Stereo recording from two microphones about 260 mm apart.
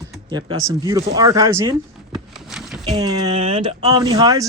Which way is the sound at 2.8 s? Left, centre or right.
Centre.